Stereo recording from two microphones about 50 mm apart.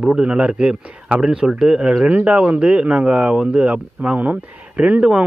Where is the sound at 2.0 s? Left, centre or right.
Right.